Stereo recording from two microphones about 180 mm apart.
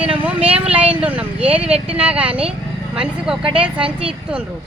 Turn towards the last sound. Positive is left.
turn(degrees=-5)  # may be behind; listen again after turning